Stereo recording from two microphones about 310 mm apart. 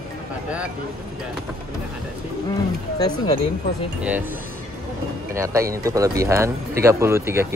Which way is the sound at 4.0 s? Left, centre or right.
Centre.